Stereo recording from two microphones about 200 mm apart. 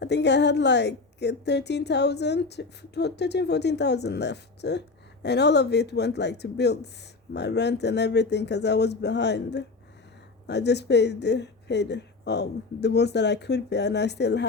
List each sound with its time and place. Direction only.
0.0 s a woman's voice: 60° left (ahead or behind)